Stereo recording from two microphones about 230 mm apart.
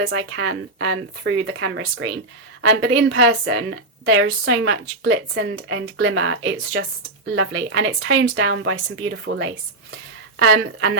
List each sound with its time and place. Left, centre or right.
0.0 s a woman's voice: right